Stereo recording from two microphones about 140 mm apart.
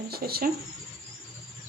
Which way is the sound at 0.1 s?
90° right.